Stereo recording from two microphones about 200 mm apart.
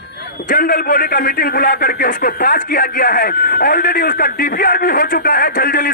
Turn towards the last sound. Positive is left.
turn(degrees=45)  # may be behind; listen again after turning